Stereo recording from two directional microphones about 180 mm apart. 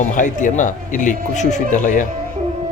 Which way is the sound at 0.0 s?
45° left (ahead or behind).